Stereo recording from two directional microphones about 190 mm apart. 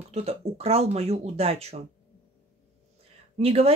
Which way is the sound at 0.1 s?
30° right (ahead or behind).